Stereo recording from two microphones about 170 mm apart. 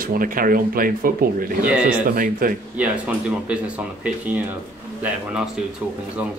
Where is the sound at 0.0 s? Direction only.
55° right (ahead or behind).